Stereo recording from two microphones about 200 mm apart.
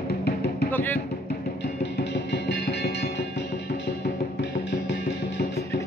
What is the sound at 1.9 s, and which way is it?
Music, 60° left (ahead or behind).